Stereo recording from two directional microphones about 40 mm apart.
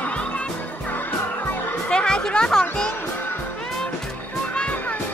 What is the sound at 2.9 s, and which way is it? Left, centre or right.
Music, left.